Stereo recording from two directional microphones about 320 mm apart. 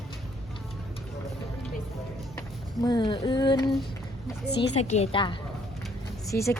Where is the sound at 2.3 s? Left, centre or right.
Centre.